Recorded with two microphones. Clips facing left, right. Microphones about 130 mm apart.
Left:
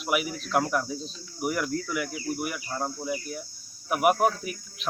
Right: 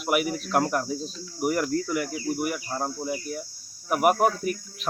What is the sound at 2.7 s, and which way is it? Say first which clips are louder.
Speech: left 2 dB; 25° right (ahead or behind).